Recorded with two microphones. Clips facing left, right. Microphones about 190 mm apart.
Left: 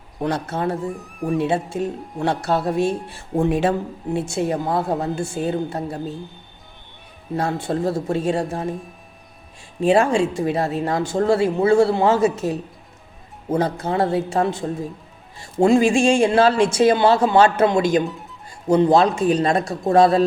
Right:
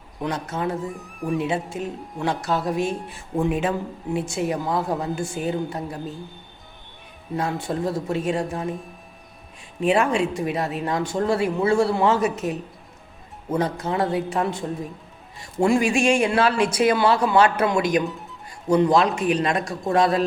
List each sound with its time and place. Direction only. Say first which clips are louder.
0.2 s speech: left 4 dB; 30° left (ahead or behind)
0.9 s speech: left 3 dB; centre (ahead or behind)
1.4 s speech: left 6 dB; 30° left (ahead or behind)
7.3 s speech: left 3 dB; 30° left (ahead or behind)
9.8 s speech: left 4 dB; 30° left (ahead or behind)
18.0 s speech: left 2 dB; centre (ahead or behind)
18.7 s speech: left 3 dB; 25° left (ahead or behind)